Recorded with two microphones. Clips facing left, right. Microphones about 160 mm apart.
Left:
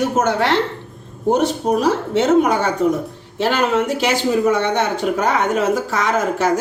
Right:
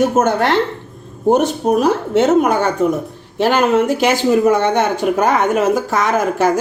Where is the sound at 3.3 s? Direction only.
50° right (ahead or behind).